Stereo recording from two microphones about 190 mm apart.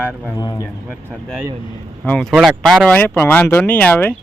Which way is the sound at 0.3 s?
15° left (ahead or behind).